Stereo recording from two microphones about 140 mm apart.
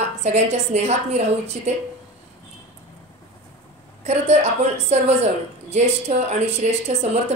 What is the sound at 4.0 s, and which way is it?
A woman's voice, 50° right (ahead or behind).